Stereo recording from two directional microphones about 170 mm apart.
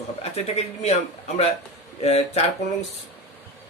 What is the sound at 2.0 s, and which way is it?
Speech, 40° left (ahead or behind).